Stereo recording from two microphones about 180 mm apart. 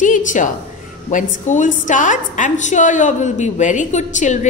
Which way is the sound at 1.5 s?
45° left (ahead or behind).